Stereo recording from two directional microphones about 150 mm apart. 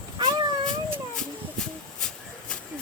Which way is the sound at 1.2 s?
5° left (ahead or behind).